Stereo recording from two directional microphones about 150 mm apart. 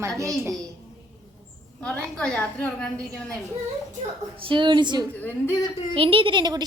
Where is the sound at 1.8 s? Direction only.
5° left (ahead or behind).